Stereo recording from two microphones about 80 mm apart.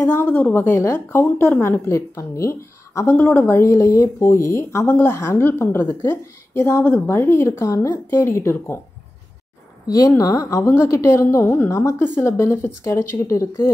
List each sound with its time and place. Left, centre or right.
0.2 s a woman's voice: left
1.1 s a woman's voice: centre
1.6 s a woman's voice: left
3.2 s a woman's voice: left
4.8 s a woman's voice: left
5.1 s a woman's voice: left
9.8 s a woman's voice: left
11.7 s a woman's voice: left